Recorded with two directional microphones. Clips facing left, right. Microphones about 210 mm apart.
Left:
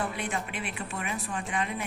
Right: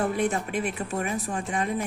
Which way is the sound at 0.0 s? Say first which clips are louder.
Right 7 dB; 40° right (ahead or behind).